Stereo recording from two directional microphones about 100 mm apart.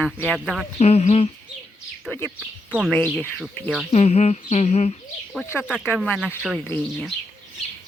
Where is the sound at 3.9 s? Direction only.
90° left.